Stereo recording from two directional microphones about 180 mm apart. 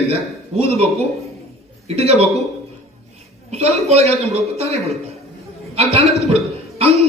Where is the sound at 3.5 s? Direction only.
35° right (ahead or behind).